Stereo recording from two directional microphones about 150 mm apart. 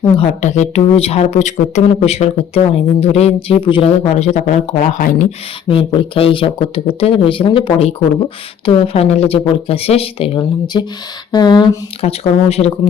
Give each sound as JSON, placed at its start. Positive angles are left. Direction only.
{"t": 0.2, "sound": "speech", "side_deg": 50}
{"t": 5.6, "sound": "speech", "side_deg": 40}
{"t": 11.3, "sound": "a sound", "side_deg": 30}
{"t": 12.0, "sound": "speech", "side_deg": 45}